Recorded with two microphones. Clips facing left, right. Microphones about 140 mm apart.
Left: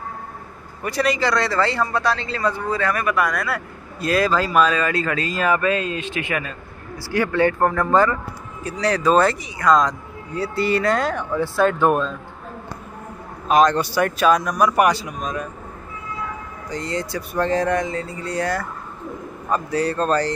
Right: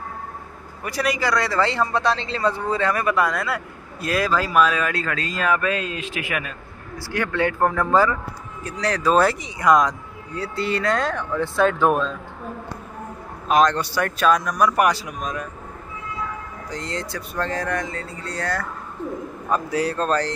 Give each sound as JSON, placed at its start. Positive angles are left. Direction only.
{"t": 0.8, "sound": "speech", "side_deg": -10}
{"t": 4.0, "sound": "speech", "side_deg": -5}
{"t": 7.0, "sound": "speech", "side_deg": 5}
{"t": 9.4, "sound": "speech", "side_deg": -15}
{"t": 9.8, "sound": "speech", "side_deg": 5}
{"t": 13.5, "sound": "speech", "side_deg": 5}
{"t": 16.7, "sound": "speech", "side_deg": 5}
{"t": 17.5, "sound": "speech", "side_deg": 25}
{"t": 19.5, "sound": "speech", "side_deg": 0}